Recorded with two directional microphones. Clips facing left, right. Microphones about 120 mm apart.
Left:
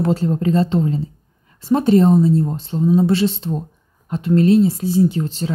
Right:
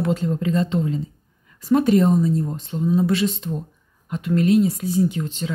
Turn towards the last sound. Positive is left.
turn(degrees=35)  # may be behind; listen again after turning